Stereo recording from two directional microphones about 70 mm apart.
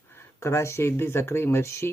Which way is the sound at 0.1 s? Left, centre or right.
Left.